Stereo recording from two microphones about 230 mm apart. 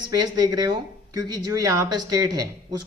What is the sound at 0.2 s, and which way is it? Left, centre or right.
Speech, centre.